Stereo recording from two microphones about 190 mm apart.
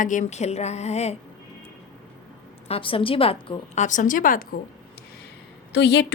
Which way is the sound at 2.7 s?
30° left (ahead or behind).